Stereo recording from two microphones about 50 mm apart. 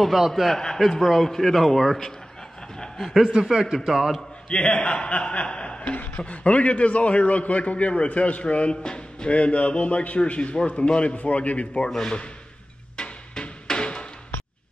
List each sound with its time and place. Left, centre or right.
0.0 s a man's voice: centre
3.4 s a man's voice: centre
4.5 s a man's voice: left
12.9 s music: centre